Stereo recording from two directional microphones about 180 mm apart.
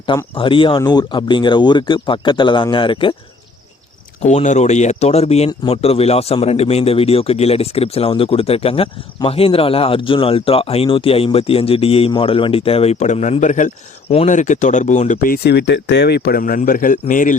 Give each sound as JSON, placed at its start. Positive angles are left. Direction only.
{"t": 0.3, "sound": "speech", "side_deg": 30}
{"t": 4.2, "sound": "speech", "side_deg": 40}